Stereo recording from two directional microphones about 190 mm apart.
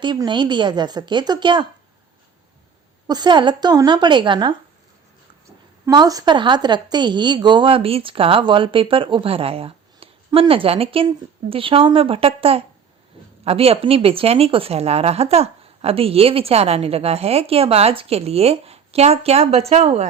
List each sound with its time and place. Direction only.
0.0 s speech: 25° right (ahead or behind)
3.1 s speech: 25° right (ahead or behind)
5.8 s a woman's voice: 20° right (ahead or behind)